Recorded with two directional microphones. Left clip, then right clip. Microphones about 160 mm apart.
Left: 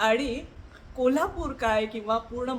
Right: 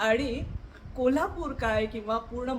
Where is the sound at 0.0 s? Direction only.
10° left (ahead or behind).